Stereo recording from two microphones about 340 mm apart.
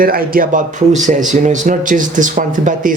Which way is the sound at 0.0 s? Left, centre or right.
Right.